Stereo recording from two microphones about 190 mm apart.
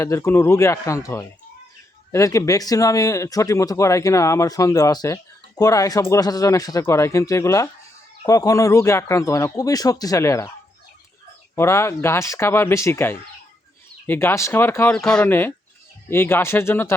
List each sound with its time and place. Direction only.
0.0 s speech: 15° left (ahead or behind)
11.5 s speech: 15° left (ahead or behind)